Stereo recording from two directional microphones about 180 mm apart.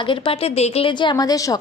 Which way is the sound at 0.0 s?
30° left (ahead or behind).